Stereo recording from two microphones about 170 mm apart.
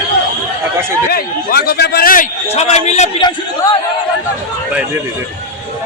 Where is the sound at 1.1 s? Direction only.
65° left (ahead or behind).